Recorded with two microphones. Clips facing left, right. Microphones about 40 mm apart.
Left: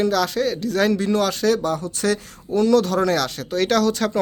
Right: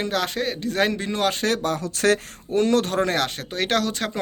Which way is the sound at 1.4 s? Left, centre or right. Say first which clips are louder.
Left 3 dB; right.